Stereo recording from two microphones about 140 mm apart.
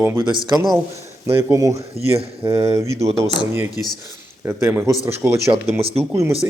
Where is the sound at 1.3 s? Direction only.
20° right (ahead or behind).